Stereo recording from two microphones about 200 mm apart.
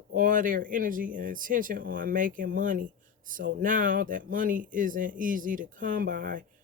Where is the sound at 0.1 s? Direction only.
45° right (ahead or behind).